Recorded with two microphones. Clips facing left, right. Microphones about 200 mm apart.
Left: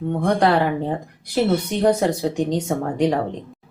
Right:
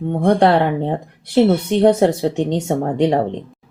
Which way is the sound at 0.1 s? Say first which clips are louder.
Right 4 dB; 30° right (ahead or behind).